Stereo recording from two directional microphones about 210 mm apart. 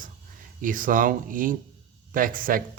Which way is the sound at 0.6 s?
40° right (ahead or behind).